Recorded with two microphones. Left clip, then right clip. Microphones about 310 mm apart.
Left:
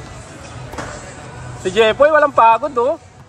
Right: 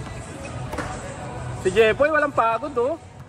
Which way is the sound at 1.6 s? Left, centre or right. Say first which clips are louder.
Left 5 dB; left.